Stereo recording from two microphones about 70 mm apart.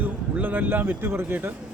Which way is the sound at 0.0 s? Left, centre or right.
Right.